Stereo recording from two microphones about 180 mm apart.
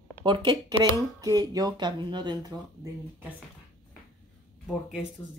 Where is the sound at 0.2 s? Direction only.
25° right (ahead or behind).